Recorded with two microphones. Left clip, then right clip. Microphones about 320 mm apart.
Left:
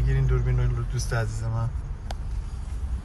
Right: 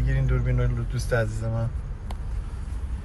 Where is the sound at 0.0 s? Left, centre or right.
Centre.